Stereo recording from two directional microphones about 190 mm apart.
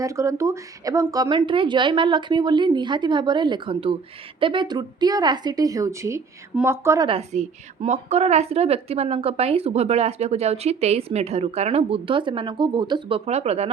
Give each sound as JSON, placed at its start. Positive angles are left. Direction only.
{"t": 0.0, "sound": "a woman's voice", "side_deg": -15}
{"t": 7.1, "sound": "a woman's voice", "side_deg": -35}